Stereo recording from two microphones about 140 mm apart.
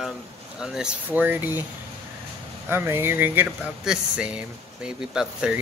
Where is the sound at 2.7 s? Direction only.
15° right (ahead or behind).